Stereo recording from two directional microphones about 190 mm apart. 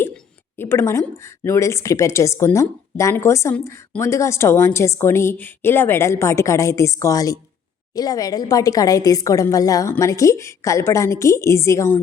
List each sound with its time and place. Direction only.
0.5 s speech: 10° left (ahead or behind)